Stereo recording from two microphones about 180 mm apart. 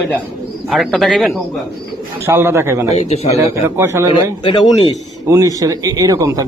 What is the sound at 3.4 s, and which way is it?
Speech, 15° right (ahead or behind).